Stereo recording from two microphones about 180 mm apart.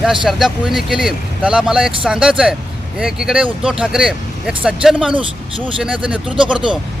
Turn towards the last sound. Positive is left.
turn(degrees=-5)  # may be behind; listen again after turning